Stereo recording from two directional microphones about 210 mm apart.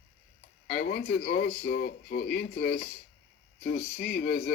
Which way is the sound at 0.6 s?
45° left (ahead or behind).